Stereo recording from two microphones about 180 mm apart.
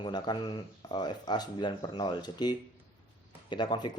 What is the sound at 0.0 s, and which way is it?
Speech, 25° left (ahead or behind).